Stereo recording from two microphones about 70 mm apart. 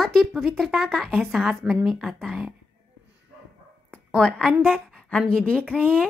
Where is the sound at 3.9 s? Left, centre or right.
Centre.